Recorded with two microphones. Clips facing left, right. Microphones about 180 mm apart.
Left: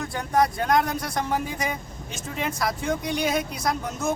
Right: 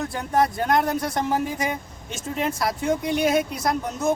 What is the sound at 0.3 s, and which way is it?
Speech, 25° right (ahead or behind).